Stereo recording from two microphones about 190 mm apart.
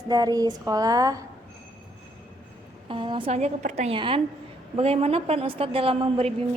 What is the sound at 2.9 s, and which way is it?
A woman's voice, 25° right (ahead or behind).